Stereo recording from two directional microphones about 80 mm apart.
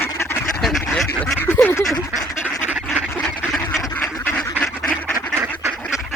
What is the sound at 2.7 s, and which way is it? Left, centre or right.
Duck, centre.